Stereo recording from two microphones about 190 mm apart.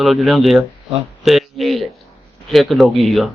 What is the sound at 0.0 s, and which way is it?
Speech, centre (ahead or behind).